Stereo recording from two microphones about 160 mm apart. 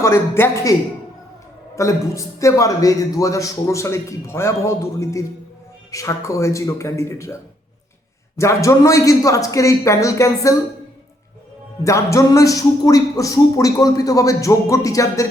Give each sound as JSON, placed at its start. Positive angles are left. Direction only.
{"t": 0.0, "sound": "a man's voice", "side_deg": 15}
{"t": 1.7, "sound": "speech", "side_deg": 20}
{"t": 8.4, "sound": "speech", "side_deg": 20}
{"t": 11.8, "sound": "speech", "side_deg": 20}